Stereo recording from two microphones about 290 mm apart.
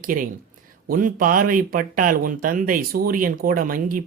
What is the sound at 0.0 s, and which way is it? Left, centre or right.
Speech, right.